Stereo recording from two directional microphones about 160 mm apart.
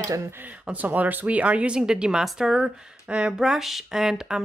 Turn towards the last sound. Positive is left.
turn(degrees=-5)  # may be behind; listen again after turning